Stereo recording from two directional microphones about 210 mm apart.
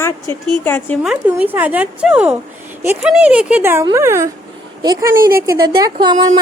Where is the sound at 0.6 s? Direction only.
10° left (ahead or behind).